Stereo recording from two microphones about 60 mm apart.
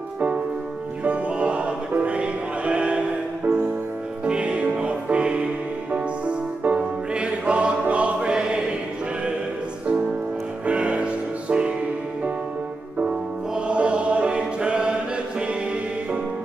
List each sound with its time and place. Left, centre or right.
1.0 s music: right
4.2 s music: centre
10.6 s music: centre
13.7 s choir: centre